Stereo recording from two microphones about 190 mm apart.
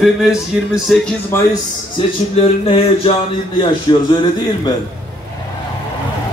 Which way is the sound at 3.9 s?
25° left (ahead or behind).